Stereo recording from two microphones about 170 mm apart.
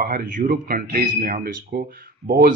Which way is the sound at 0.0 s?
55° right (ahead or behind).